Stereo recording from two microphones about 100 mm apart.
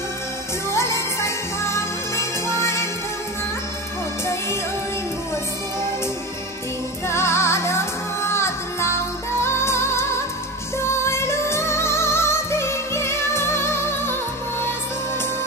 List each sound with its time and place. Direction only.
0.7 s music: 25° left (ahead or behind)
7.1 s music: 25° left (ahead or behind)